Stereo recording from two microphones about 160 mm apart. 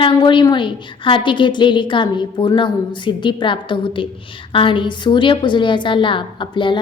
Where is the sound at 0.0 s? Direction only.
30° left (ahead or behind).